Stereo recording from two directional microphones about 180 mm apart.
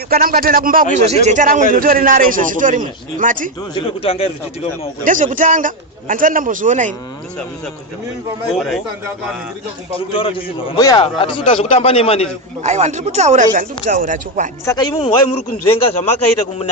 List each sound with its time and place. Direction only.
0.1 s a man's voice: 55° right (ahead or behind)
1.0 s a man's voice: 35° right (ahead or behind)
3.8 s a man's voice: 30° left (ahead or behind)
5.0 s a man's voice: 45° right (ahead or behind)
8.5 s speech: centre (ahead or behind)
10.1 s a man's voice: 30° left (ahead or behind)
12.6 s speech: 40° right (ahead or behind)
14.6 s speech: 15° left (ahead or behind)
15.8 s a man's voice: 35° left (ahead or behind)